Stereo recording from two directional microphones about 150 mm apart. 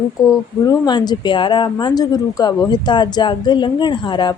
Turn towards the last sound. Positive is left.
turn(degrees=30)  # may be behind; listen again after turning